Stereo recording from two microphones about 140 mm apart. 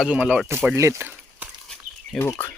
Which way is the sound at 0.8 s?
20° right (ahead or behind).